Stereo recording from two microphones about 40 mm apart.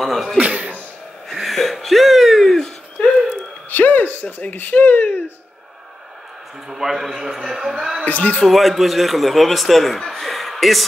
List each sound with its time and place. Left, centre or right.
0.0 s speech: centre
0.4 s a sound: right
1.3 s a sound: centre
3.7 s speech: left
6.7 s a man's voice: centre
8.0 s speech: left
8.5 s speech: centre